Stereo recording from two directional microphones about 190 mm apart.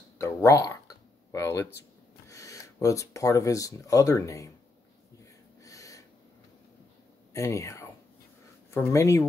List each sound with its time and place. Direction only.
0.2 s a sound: 15° left (ahead or behind)
2.2 s speech: 15° left (ahead or behind)
5.6 s snort: 15° left (ahead or behind)
7.3 s speech: 15° left (ahead or behind)